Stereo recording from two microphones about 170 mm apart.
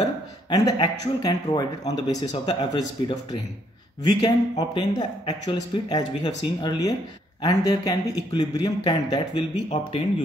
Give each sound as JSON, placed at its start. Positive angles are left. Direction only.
{"t": 0.5, "sound": "speech", "side_deg": 25}